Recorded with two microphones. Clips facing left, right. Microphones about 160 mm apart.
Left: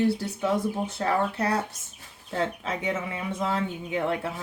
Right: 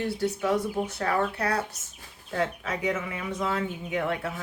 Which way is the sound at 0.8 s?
30° left (ahead or behind).